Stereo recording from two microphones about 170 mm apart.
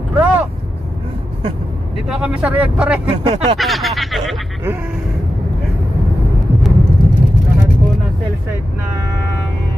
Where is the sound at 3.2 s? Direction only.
35° right (ahead or behind).